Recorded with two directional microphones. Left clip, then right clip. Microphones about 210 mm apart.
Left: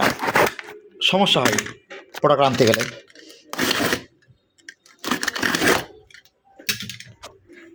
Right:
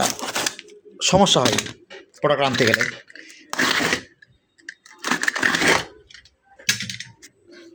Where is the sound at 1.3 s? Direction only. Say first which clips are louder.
Even; 15° right (ahead or behind).